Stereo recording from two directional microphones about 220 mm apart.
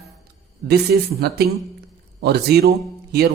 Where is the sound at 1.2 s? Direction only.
45° right (ahead or behind).